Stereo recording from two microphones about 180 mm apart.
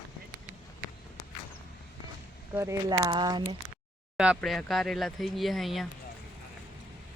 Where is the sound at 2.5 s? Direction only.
15° right (ahead or behind).